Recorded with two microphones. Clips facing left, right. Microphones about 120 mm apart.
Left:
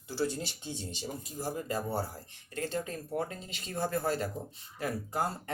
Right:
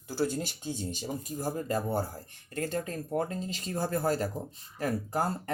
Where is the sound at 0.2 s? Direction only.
45° right (ahead or behind).